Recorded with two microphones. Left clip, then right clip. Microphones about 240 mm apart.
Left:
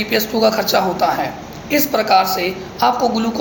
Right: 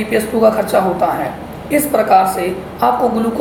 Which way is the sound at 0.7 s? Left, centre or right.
Left.